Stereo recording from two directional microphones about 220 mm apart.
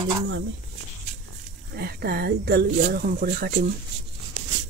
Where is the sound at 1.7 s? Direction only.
45° right (ahead or behind).